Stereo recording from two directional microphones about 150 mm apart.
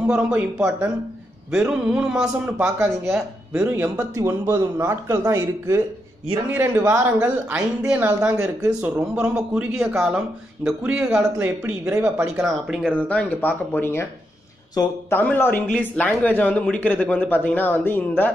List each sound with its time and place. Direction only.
0.1 s a man's voice: 10° right (ahead or behind)
12.9 s a man's voice: 10° left (ahead or behind)